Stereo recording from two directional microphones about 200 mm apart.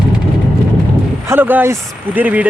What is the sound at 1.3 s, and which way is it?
Speech, 10° right (ahead or behind).